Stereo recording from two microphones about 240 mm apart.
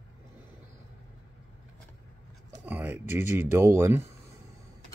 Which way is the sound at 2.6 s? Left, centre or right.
Centre.